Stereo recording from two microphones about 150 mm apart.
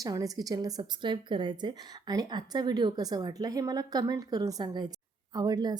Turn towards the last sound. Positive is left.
turn(degrees=-25)  # may be behind; listen again after turning